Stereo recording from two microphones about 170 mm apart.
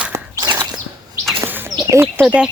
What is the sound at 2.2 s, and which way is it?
Speech, 5° right (ahead or behind).